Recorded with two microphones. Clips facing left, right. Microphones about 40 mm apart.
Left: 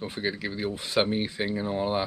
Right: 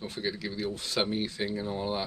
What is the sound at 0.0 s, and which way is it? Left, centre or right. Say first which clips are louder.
Speech: left 3 dB; left.